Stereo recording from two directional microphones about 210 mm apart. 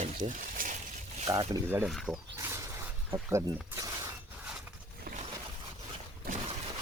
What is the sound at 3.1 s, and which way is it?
Speech, 15° right (ahead or behind).